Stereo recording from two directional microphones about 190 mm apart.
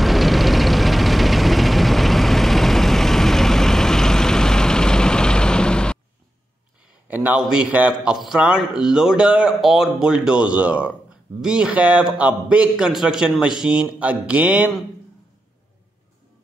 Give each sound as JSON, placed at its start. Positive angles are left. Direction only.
{"t": 0.0, "sound": "vehicle", "side_deg": 0}
{"t": 7.2, "sound": "a man's voice", "side_deg": -5}